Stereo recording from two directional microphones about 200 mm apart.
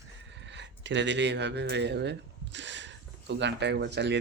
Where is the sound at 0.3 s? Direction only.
65° right (ahead or behind).